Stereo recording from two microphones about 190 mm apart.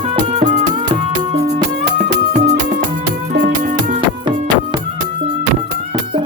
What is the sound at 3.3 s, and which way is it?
Music, 60° right (ahead or behind).